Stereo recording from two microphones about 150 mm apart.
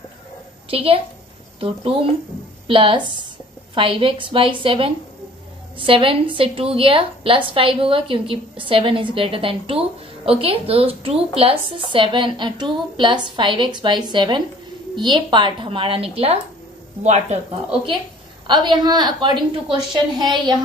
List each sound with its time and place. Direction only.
0.7 s a woman's voice: 40° right (ahead or behind)
18.5 s a woman's voice: 30° right (ahead or behind)